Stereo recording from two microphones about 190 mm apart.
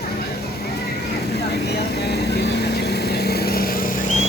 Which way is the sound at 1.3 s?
60° left (ahead or behind).